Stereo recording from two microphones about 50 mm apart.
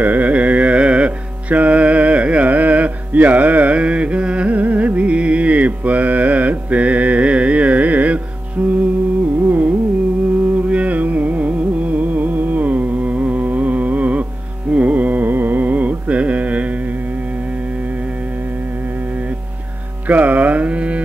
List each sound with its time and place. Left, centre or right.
0.0 s carnatic music: right
14.7 s music: right
20.1 s music: right